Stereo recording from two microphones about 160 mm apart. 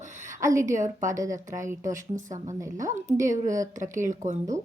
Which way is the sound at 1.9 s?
50° right (ahead or behind).